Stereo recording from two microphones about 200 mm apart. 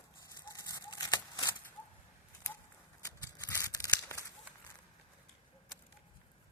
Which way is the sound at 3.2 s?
15° left (ahead or behind).